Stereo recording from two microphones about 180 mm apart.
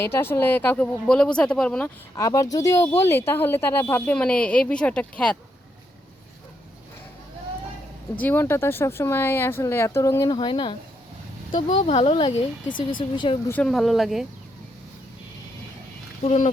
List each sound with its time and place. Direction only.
0.0 s speech: 15° left (ahead or behind)
2.1 s speech: 20° left (ahead or behind)
8.2 s speech: 10° left (ahead or behind); by 13.1 s 50° left (ahead or behind)
13.5 s speech: 5° left (ahead or behind)
16.2 s speech: 40° left (ahead or behind)